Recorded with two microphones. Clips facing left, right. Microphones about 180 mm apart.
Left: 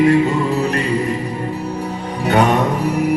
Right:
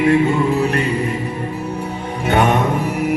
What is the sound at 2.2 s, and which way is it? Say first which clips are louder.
Music: left 1 dB; 35° left (ahead or behind).